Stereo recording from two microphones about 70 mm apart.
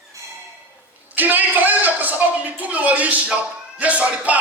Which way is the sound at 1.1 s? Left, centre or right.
Right.